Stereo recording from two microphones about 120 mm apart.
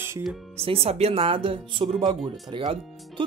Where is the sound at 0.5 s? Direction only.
55° right (ahead or behind).